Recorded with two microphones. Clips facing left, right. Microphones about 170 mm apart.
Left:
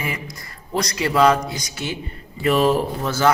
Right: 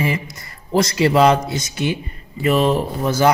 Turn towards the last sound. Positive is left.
turn(degrees=-15)  # may be behind; listen again after turning